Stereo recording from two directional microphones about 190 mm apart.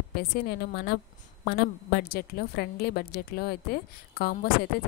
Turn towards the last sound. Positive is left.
turn(degrees=50)  # may be behind; listen again after turning